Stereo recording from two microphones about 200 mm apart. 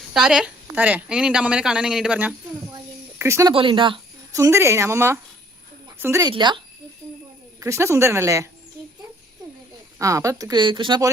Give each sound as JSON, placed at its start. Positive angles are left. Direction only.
{"t": 0.1, "sound": "a woman's voice", "side_deg": 0}
{"t": 3.5, "sound": "a woman's voice", "side_deg": -25}
{"t": 7.6, "sound": "a woman's voice", "side_deg": -15}
{"t": 10.0, "sound": "a woman's voice", "side_deg": -15}